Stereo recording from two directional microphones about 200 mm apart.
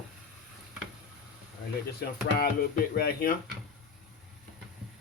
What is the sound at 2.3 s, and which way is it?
A man's voice, 50° left (ahead or behind).